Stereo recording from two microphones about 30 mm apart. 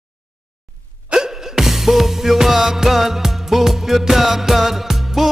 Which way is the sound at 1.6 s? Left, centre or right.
Centre.